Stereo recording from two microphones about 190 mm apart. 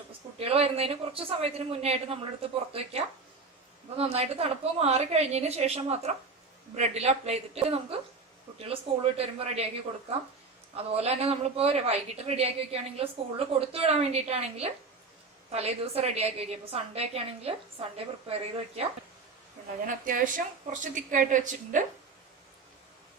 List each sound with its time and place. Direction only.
0.3 s a woman's voice: 30° right (ahead or behind)
10.8 s a woman's voice: 35° right (ahead or behind)
19.8 s a woman's voice: 45° right (ahead or behind)